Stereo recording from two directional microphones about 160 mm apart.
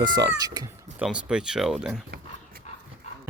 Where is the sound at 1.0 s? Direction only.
5° right (ahead or behind).